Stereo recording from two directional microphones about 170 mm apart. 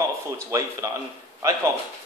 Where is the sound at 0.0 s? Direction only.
20° right (ahead or behind).